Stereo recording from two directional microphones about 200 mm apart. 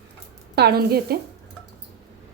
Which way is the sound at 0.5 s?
55° right (ahead or behind).